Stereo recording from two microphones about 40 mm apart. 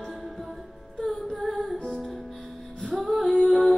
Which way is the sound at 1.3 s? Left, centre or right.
Centre.